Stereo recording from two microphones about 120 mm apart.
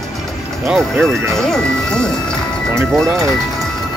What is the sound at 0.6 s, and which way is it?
Speech, centre (ahead or behind).